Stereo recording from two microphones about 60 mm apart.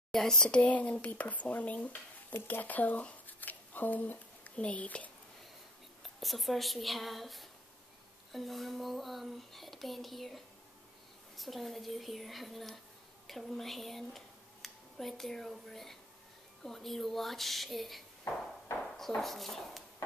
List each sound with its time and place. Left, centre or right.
0.1 s speech: centre; by 5.1 s left
6.0 s speech: centre